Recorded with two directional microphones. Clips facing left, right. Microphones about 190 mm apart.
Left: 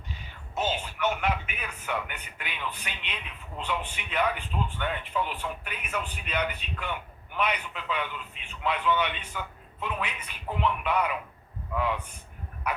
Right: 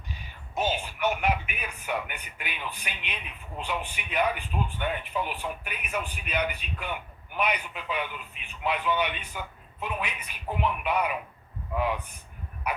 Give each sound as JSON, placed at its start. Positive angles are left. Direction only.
{"t": 0.5, "sound": "music", "side_deg": -10}
{"t": 3.6, "sound": "a man's voice", "side_deg": -10}